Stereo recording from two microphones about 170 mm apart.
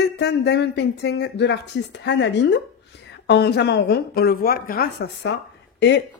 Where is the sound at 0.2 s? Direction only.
85° left.